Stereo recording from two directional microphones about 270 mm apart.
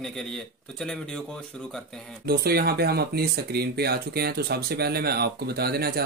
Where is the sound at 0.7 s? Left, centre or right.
Centre.